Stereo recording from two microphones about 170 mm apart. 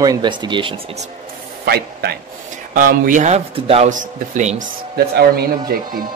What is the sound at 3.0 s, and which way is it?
Speech, 45° right (ahead or behind).